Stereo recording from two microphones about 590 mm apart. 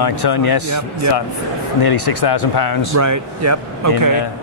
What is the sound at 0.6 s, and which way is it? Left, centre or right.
Speech, right.